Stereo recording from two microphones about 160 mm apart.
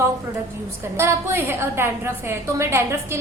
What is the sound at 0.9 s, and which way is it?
A woman's voice, 15° right (ahead or behind).